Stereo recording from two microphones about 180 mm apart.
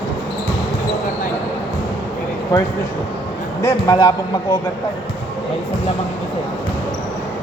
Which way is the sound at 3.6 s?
15° left (ahead or behind).